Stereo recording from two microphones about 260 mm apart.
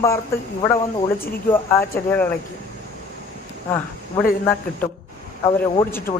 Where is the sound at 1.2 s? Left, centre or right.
Centre.